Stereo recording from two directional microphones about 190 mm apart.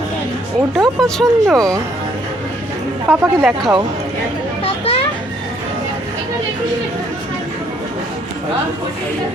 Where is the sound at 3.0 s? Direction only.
10° right (ahead or behind).